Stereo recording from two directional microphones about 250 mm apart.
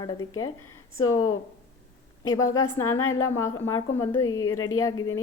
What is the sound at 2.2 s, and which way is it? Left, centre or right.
Speech, left.